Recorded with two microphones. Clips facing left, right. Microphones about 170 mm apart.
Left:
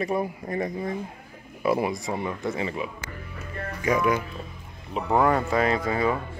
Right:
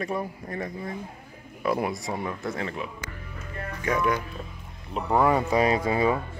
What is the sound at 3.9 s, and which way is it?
Speech, 5° left (ahead or behind).